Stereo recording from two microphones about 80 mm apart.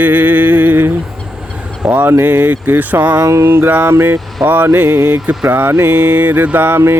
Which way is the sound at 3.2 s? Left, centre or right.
Right.